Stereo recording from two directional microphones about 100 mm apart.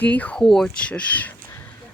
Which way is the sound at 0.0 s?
15° left (ahead or behind).